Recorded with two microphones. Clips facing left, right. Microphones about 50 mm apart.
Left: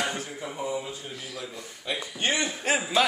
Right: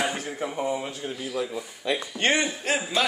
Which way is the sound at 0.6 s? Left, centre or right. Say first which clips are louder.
Right 2 dB; right.